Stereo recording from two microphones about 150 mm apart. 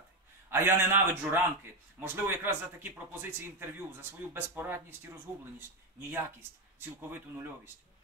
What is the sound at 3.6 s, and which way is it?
Speech, 15° right (ahead or behind).